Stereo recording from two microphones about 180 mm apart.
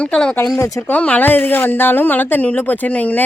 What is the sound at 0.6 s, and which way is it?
A woman's voice, 15° left (ahead or behind).